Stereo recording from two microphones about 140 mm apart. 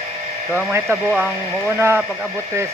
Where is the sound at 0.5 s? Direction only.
15° right (ahead or behind).